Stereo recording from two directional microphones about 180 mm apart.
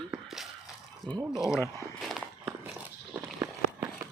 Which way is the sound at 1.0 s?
25° right (ahead or behind).